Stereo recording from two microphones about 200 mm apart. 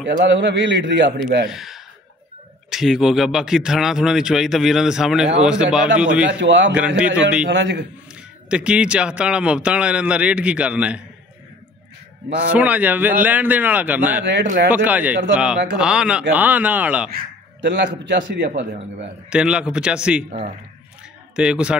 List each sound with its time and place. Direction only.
0.0 s a man's voice: 60° right (ahead or behind)
1.5 s speech: centre (ahead or behind)
6.4 s a man's voice: 65° right (ahead or behind)
7.0 s speech: 5° right (ahead or behind)
7.4 s a man's voice: 60° right (ahead or behind)
8.1 s speech: 5° right (ahead or behind)
12.5 s speech: 5° right (ahead or behind)
14.2 s a man's voice: 60° right (ahead or behind)
14.7 s speech: 10° right (ahead or behind)
17.1 s speech: 60° right (ahead or behind)
19.3 s speech: 5° right (ahead or behind)
20.2 s a man's voice: 35° right (ahead or behind)
21.4 s speech: 5° right (ahead or behind)